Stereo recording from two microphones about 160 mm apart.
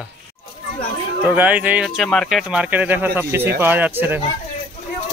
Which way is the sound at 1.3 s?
10° right (ahead or behind).